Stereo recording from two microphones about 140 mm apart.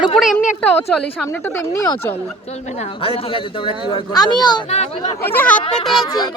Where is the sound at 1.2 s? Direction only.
15° left (ahead or behind).